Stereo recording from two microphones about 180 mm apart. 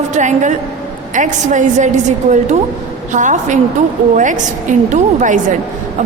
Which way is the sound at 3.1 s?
45° right (ahead or behind).